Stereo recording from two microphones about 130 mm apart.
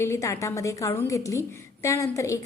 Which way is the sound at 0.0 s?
20° left (ahead or behind).